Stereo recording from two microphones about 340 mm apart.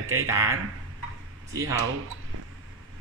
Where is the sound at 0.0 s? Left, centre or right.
Right.